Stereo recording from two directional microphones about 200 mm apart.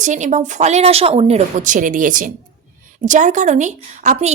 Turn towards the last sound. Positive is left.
turn(degrees=-35)  # may be behind; listen again after turning